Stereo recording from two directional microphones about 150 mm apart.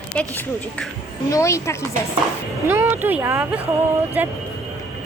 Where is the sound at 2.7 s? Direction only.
15° right (ahead or behind).